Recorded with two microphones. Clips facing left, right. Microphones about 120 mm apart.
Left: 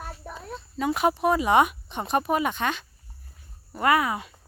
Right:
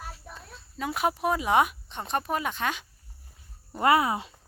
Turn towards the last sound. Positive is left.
turn(degrees=-25)  # may be behind; listen again after turning